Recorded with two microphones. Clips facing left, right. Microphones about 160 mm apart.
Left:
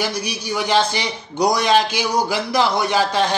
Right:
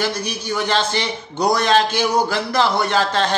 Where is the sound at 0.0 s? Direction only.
10° left (ahead or behind).